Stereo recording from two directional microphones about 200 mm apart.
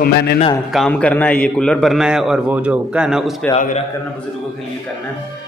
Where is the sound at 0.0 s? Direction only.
50° left (ahead or behind).